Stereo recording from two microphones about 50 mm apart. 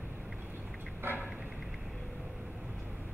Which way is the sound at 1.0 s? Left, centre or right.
Right.